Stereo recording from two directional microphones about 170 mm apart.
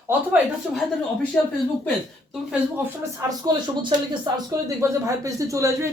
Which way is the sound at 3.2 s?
25° right (ahead or behind).